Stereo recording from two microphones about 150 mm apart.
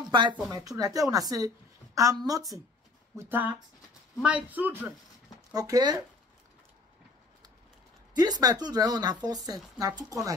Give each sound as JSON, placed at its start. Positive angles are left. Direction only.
{"t": 0.1, "sound": "speech", "side_deg": -30}
{"t": 3.2, "sound": "a man's voice", "side_deg": -15}
{"t": 5.5, "sound": "speech", "side_deg": -25}
{"t": 8.1, "sound": "speech", "side_deg": -25}